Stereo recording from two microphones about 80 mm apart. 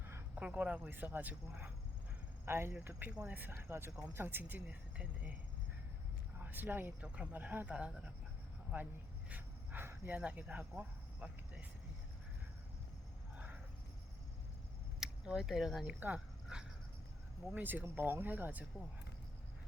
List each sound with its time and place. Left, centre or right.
0.3 s speech: centre
2.5 s speech: right
2.8 s speech: centre
6.4 s speech: right
9.3 s a sound: right
10.2 s speech: centre
13.3 s a sound: centre
15.0 s speech: centre
15.8 s speech: right
16.5 s dog: centre
17.5 s speech: right